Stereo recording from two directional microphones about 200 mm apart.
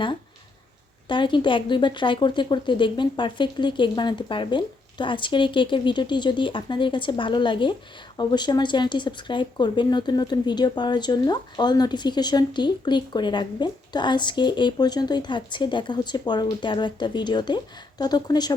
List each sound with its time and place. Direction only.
1.0 s speech: 25° left (ahead or behind)